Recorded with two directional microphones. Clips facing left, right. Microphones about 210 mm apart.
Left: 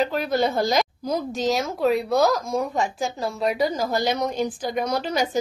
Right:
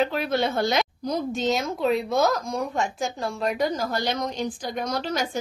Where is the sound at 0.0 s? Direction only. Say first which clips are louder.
Left 2 dB; centre (ahead or behind).